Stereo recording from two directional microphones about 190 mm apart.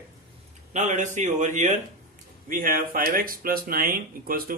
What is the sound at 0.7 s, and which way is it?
A man's voice, 40° right (ahead or behind).